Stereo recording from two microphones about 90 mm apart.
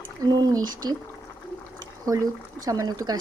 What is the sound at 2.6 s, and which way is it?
Speech, 45° right (ahead or behind).